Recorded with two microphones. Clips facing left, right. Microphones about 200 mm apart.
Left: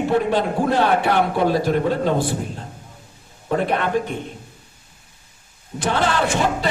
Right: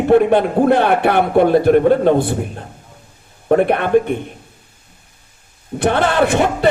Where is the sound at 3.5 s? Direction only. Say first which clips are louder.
Right 7 dB; 60° right (ahead or behind).